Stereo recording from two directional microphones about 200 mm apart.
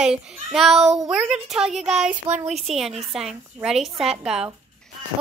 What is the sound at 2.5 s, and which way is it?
Speech, centre (ahead or behind).